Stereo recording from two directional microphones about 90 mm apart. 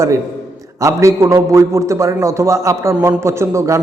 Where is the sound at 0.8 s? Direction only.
35° right (ahead or behind).